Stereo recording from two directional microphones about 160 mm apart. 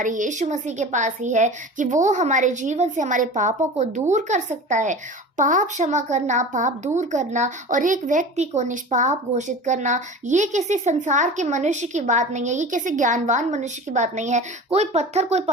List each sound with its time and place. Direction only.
0.0 s a child's voice: 55° right (ahead or behind)